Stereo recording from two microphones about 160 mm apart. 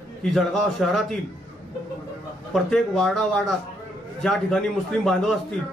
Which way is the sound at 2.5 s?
Centre (ahead or behind).